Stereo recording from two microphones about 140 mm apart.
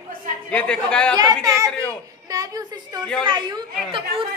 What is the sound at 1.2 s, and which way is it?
A woman's voice, 25° right (ahead or behind).